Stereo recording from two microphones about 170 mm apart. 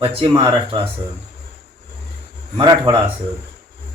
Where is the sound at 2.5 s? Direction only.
25° right (ahead or behind).